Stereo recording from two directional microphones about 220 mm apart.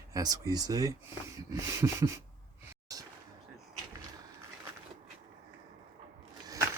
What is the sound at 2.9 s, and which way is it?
Artillery fire, 15° right (ahead or behind).